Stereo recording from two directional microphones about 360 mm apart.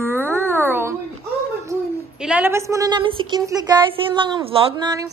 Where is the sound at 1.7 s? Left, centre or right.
Centre.